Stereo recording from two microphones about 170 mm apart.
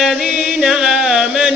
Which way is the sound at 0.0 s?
Centre (ahead or behind).